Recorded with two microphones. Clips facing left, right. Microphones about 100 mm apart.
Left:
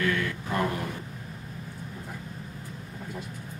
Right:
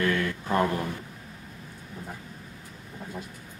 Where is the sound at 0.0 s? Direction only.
30° right (ahead or behind).